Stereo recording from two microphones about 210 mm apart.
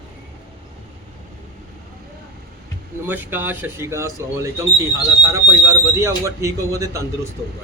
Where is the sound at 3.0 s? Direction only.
10° right (ahead or behind).